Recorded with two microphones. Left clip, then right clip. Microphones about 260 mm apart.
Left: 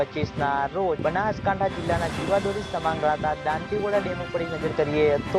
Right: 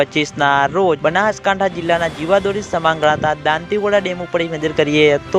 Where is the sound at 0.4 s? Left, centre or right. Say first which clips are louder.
Right 10 dB; right.